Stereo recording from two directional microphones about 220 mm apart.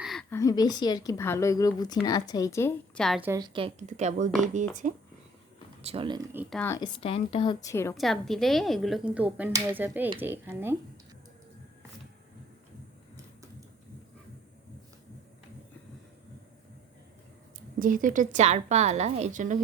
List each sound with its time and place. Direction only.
0.0 s speech: centre (ahead or behind)
3.2 s a woman's voice: 15° right (ahead or behind)
6.3 s speech: 5° right (ahead or behind)
6.6 s speech: 15° left (ahead or behind)
7.9 s speech: centre (ahead or behind)
17.7 s a woman's voice: 35° right (ahead or behind)